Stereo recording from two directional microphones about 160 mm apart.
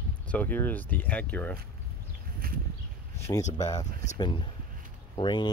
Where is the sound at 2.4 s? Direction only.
65° right (ahead or behind).